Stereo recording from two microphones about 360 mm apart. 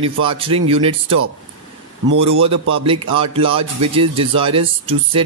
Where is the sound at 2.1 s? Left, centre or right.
Right.